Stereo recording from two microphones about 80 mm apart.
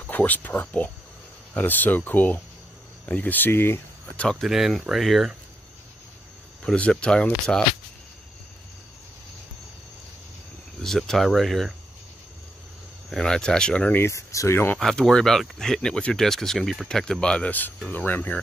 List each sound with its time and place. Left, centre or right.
0.0 s speech: centre
4.0 s speech: centre
4.4 s speech: centre
6.6 s speech: centre
10.8 s speech: centre
13.1 s speech: centre
14.0 s speech: left
14.8 s speech: centre; by 18.4 s left